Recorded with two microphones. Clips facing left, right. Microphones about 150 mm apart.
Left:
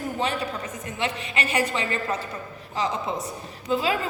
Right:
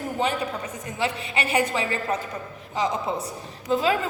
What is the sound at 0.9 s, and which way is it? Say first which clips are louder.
A woman's voice: right 2 dB; 30° right (ahead or behind).